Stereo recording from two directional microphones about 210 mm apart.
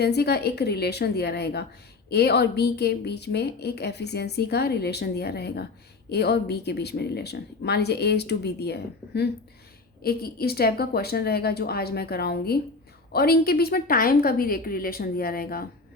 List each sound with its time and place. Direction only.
0.0 s a woman's voice: 50° left (ahead or behind)